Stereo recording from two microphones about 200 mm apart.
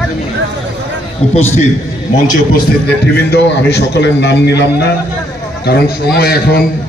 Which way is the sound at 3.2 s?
55° left (ahead or behind).